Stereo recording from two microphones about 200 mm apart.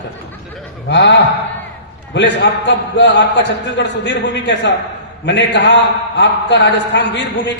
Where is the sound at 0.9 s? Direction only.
60° left (ahead or behind).